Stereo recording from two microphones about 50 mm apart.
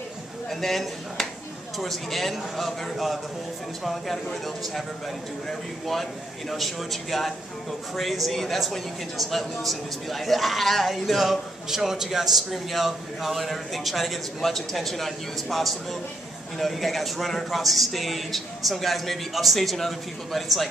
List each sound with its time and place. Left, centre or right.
0.5 s a man's voice: centre